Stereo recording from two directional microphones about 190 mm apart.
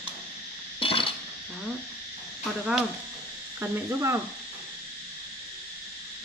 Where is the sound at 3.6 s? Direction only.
15° right (ahead or behind).